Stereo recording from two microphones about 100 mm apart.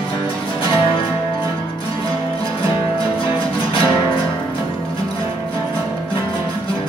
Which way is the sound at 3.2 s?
60° left (ahead or behind).